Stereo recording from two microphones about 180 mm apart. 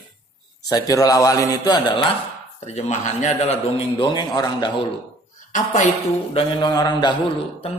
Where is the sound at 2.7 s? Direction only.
40° left (ahead or behind).